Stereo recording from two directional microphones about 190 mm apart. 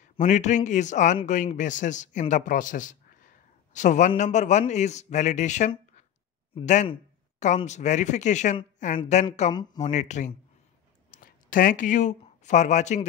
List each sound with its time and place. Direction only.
0.0 s a man's voice: 40° left (ahead or behind)